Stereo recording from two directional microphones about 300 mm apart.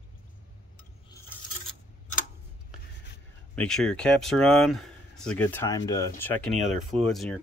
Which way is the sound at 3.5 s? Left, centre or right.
Centre.